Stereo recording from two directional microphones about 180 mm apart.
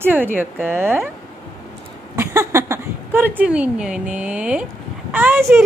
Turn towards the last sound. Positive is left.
turn(degrees=-10)  # may be behind; listen again after turning